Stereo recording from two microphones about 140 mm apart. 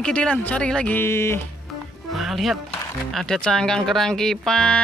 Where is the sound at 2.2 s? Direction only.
Centre (ahead or behind).